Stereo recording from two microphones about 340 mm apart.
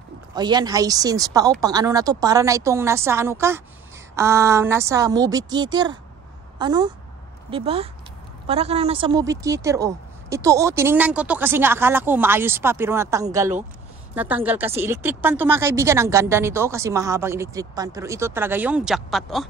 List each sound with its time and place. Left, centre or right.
0.3 s speech: centre